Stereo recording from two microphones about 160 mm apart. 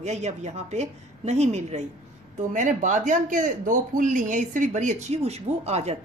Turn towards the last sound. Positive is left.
turn(degrees=-40)  # may be behind; listen again after turning